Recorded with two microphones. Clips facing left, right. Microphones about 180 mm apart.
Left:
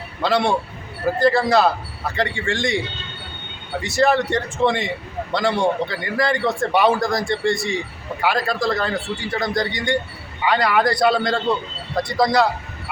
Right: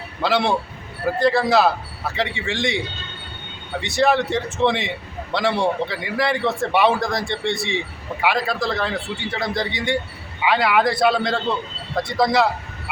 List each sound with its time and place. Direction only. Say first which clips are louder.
0.2 s a man's voice: left 1 dB; centre (ahead or behind)